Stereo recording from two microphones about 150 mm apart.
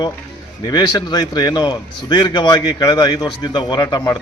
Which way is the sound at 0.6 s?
25° left (ahead or behind).